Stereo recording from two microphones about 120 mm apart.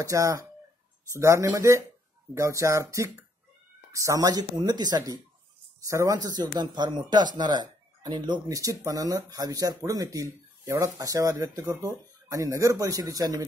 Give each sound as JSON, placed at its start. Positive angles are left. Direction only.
{"t": 0.0, "sound": "speech", "side_deg": -25}